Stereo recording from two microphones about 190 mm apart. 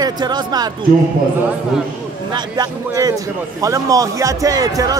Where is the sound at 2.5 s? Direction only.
20° right (ahead or behind).